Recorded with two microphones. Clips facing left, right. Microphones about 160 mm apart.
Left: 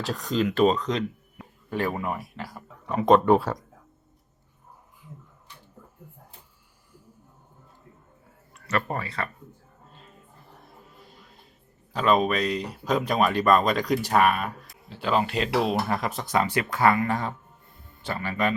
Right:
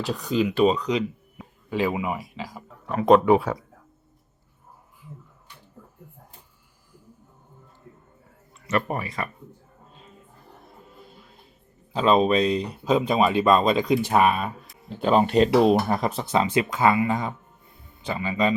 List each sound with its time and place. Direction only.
0.1 s speech: centre (ahead or behind)
2.3 s speech: 15° right (ahead or behind)
2.6 s speech: centre (ahead or behind)
8.5 s speech: 20° right (ahead or behind)
10.7 s music: centre (ahead or behind)
11.9 s speech: 30° right (ahead or behind)
12.5 s speech: centre (ahead or behind)
13.4 s speech: 25° right (ahead or behind)
13.8 s speech: centre (ahead or behind)
15.0 s speech: 40° right (ahead or behind)
15.4 s speech: centre (ahead or behind)
16.3 s speech: 20° right (ahead or behind)
17.7 s a sound: centre (ahead or behind)
18.1 s speech: 20° right (ahead or behind)